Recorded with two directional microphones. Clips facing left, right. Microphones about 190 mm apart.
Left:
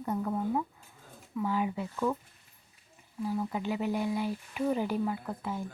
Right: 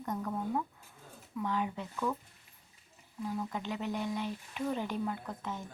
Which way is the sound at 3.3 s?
10° left (ahead or behind).